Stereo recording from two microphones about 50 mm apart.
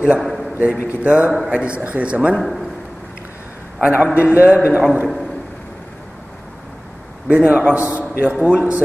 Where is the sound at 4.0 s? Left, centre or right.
Right.